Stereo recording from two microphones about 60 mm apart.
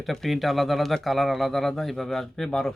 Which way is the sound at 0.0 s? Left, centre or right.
Centre.